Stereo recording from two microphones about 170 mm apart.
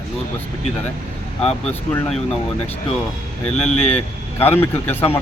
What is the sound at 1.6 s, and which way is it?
Speech, 5° left (ahead or behind).